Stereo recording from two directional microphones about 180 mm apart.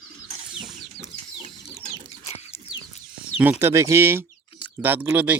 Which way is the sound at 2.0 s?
35° left (ahead or behind).